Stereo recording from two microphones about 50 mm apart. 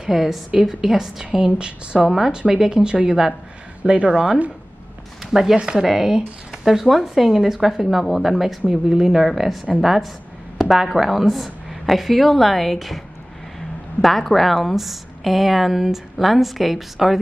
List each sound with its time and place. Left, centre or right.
0.0 s a woman's voice: centre
1.4 s a woman's voice: right
5.2 s a woman's voice: centre
14.0 s a woman's voice: centre